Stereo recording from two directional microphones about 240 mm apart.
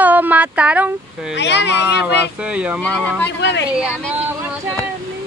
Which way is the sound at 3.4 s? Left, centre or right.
Left.